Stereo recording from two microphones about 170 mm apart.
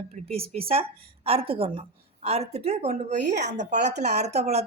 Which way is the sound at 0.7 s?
35° right (ahead or behind).